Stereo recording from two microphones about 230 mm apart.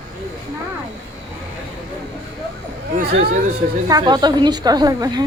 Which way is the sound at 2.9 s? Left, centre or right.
Right.